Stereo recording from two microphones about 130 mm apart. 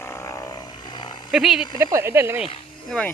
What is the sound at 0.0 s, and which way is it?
Vehicle, 20° left (ahead or behind).